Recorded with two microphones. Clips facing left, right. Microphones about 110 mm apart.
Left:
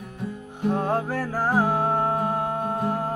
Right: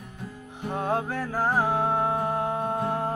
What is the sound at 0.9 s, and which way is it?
Music, 5° left (ahead or behind).